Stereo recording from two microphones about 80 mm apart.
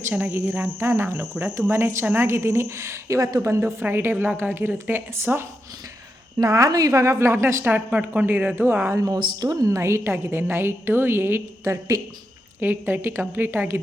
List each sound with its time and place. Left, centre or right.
0.3 s a woman's voice: right
4.1 s a woman's voice: centre
4.4 s a woman's voice: right
6.4 s a woman's voice: right
9.1 s a woman's voice: right
11.6 s a woman's voice: right
12.5 s a woman's voice: right